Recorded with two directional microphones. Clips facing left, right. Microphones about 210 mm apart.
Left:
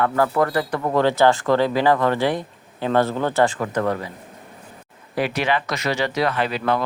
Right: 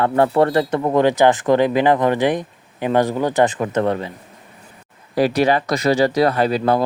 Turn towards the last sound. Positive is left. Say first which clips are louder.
# right 5 dB
turn(degrees=-40)  # may be behind; listen again after turning